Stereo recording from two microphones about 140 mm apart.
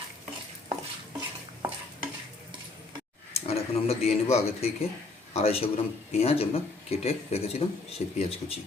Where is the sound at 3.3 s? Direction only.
45° left (ahead or behind).